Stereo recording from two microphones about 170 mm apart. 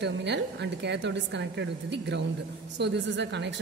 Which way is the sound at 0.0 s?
90° right.